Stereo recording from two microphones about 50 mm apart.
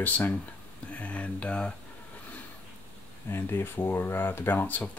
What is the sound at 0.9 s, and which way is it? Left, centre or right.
Speech, left.